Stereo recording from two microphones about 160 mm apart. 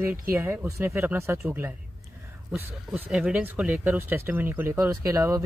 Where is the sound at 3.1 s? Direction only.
5° right (ahead or behind).